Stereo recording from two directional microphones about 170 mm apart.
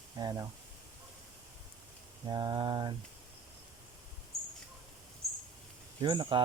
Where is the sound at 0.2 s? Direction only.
25° right (ahead or behind).